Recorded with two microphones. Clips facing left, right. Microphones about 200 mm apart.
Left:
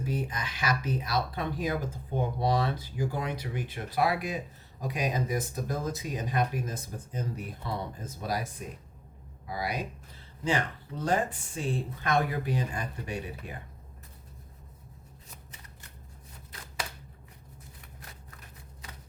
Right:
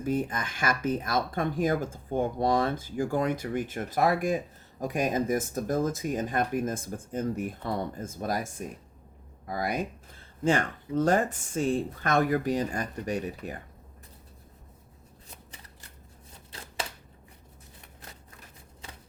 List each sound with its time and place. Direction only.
0.0 s speech: 50° right (ahead or behind)